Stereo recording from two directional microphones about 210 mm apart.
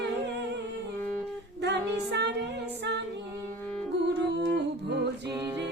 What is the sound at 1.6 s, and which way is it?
Music, 55° right (ahead or behind).